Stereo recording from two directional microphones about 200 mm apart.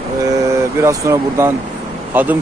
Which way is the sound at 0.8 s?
15° right (ahead or behind).